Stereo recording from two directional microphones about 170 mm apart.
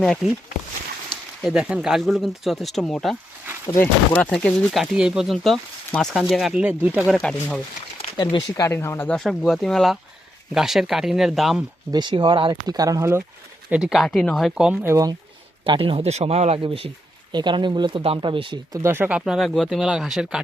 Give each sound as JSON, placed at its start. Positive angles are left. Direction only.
{"t": 0.0, "sound": "speech", "side_deg": 0}
{"t": 1.4, "sound": "speech", "side_deg": -5}
{"t": 3.7, "sound": "speech", "side_deg": 20}
{"t": 4.2, "sound": "speech", "side_deg": 5}
{"t": 8.0, "sound": "speech", "side_deg": 30}
{"t": 11.9, "sound": "speech", "side_deg": -25}
{"t": 13.7, "sound": "speech", "side_deg": -5}
{"t": 15.6, "sound": "speech", "side_deg": -30}